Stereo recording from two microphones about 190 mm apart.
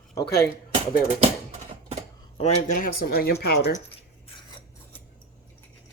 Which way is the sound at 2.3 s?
40° left (ahead or behind).